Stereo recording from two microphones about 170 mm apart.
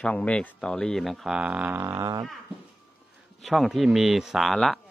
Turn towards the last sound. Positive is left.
turn(degrees=0)  # may be behind; listen again after turning